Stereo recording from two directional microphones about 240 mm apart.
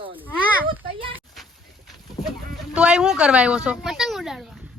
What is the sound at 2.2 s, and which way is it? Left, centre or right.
Sheep, centre.